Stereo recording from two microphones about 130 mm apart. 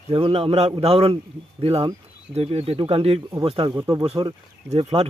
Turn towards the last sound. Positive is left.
turn(degrees=-45)  # may be behind; listen again after turning